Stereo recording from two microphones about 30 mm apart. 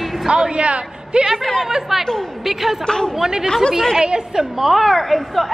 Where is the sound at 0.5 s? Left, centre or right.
Right.